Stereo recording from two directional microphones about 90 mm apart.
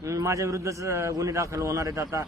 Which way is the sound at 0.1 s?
35° right (ahead or behind).